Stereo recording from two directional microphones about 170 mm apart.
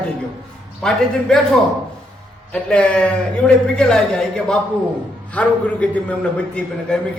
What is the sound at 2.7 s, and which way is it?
A man's voice, 5° left (ahead or behind).